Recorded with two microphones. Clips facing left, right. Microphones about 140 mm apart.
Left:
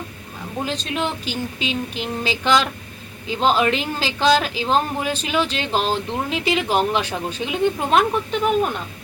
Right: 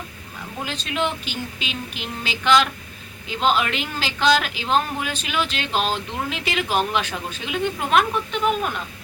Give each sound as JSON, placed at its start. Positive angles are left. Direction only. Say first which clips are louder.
{"t": 0.6, "sound": "a woman's voice", "louder": "left 1 dB", "side_deg": 35}